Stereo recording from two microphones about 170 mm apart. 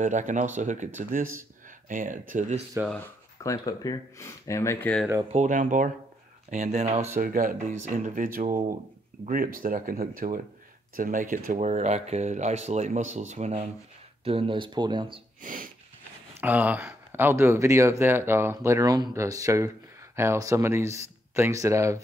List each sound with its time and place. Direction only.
0.0 s speech: 45° right (ahead or behind)
3.4 s speech: 20° left (ahead or behind)
5.3 s speech: 45° right (ahead or behind)
7.2 s speech: 55° right (ahead or behind); by 15.1 s 25° right (ahead or behind)
15.4 s speech: 55° right (ahead or behind)
16.3 s speech: 10° right (ahead or behind)